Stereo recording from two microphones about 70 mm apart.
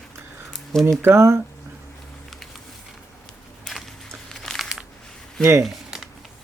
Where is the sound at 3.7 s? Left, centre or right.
Centre.